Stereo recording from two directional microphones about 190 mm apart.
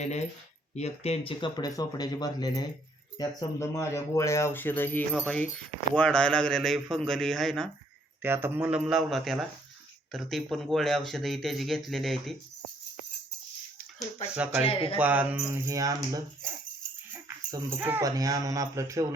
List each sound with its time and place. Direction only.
0.0 s speech: 35° left (ahead or behind); by 7.7 s centre (ahead or behind)
8.2 s speech: 10° right (ahead or behind)
14.3 s speech: 5° right (ahead or behind)
14.6 s speech: 30° left (ahead or behind)
14.9 s speech: 10° right (ahead or behind)